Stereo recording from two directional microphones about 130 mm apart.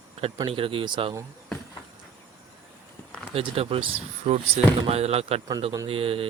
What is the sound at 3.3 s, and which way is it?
Speech, 50° right (ahead or behind).